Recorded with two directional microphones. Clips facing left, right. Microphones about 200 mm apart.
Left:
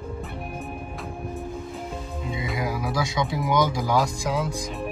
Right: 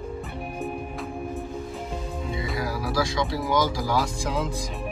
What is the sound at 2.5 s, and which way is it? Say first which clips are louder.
Music: even; 20° left (ahead or behind).